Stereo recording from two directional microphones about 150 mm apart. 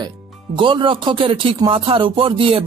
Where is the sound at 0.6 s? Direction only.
35° right (ahead or behind).